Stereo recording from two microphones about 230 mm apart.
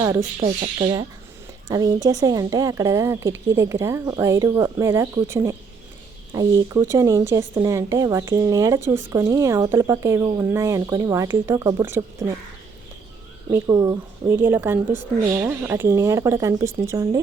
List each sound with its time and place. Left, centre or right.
0.0 s speech: centre
0.3 s speech: right
13.5 s speech: centre